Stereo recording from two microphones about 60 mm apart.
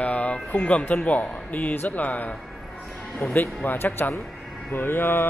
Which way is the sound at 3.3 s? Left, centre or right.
Left.